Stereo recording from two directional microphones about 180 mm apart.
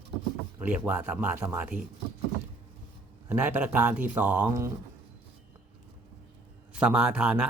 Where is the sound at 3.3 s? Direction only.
10° right (ahead or behind).